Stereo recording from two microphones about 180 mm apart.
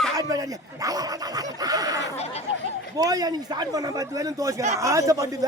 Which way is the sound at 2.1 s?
35° left (ahead or behind).